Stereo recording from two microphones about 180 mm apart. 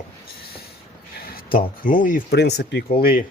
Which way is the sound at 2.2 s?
65° left (ahead or behind).